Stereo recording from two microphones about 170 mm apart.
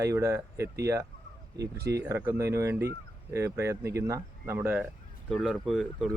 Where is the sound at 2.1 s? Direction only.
15° right (ahead or behind).